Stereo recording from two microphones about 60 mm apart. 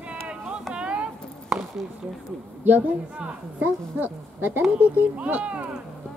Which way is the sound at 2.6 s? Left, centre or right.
Right.